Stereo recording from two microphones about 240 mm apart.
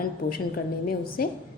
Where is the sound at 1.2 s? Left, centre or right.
Left.